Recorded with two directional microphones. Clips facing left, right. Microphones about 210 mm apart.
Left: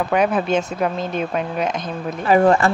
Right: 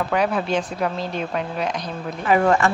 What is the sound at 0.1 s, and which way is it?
Speech, 20° left (ahead or behind).